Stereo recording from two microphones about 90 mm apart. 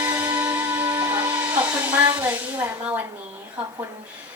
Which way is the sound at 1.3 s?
20° right (ahead or behind).